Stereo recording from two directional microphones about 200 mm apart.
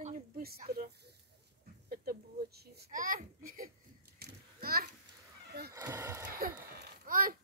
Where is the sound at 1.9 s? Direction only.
50° right (ahead or behind).